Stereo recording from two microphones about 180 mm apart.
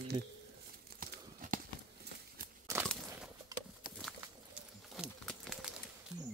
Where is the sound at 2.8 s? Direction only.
5° left (ahead or behind).